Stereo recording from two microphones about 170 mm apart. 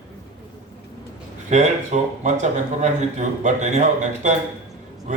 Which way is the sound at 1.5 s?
45° right (ahead or behind).